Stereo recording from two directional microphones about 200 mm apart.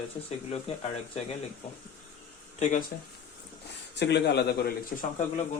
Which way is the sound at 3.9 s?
60° left (ahead or behind).